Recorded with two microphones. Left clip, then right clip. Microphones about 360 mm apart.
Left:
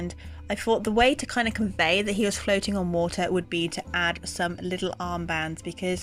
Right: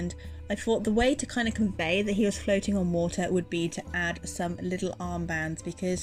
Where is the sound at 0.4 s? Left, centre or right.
Left.